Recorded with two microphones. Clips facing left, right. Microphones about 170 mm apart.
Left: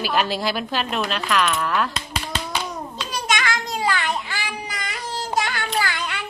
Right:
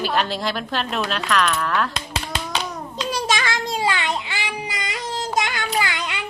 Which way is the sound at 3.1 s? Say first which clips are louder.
Right 1 dB; 30° right (ahead or behind).